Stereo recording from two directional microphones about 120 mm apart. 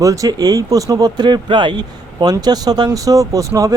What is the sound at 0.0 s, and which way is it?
Speech, 30° right (ahead or behind).